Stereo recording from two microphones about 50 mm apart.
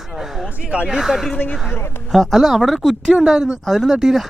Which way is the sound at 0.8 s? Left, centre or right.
Centre.